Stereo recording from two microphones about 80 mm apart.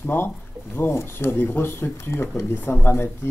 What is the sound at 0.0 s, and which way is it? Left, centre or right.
Speech, left.